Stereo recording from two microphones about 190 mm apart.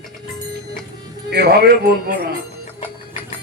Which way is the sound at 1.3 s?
60° right (ahead or behind).